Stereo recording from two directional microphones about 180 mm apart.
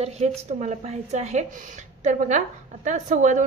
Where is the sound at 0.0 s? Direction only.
35° right (ahead or behind).